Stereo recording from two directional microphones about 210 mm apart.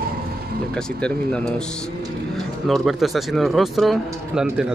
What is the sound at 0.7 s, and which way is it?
Speech, 5° left (ahead or behind).